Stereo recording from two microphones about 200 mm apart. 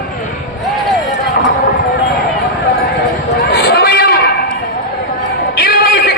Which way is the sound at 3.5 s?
50° left (ahead or behind).